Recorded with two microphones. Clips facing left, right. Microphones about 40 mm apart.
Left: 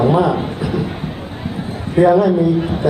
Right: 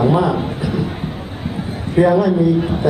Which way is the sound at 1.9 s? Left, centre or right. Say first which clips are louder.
Left 2 dB; centre.